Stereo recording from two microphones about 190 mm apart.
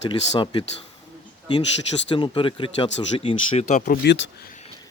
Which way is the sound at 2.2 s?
25° left (ahead or behind).